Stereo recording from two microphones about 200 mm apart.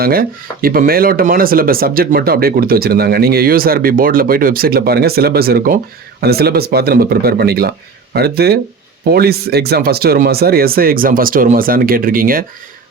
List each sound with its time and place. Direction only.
0.0 s speech: 45° right (ahead or behind)